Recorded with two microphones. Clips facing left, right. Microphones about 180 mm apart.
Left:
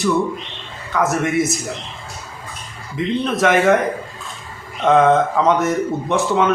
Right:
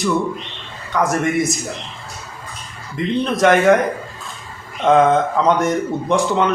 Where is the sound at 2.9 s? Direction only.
Centre (ahead or behind).